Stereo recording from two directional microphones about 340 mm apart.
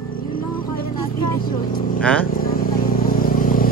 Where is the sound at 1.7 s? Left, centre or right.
Left.